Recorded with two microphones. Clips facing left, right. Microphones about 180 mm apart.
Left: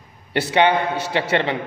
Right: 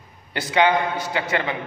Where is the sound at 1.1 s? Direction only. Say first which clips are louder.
Left 6 dB; 30° left (ahead or behind).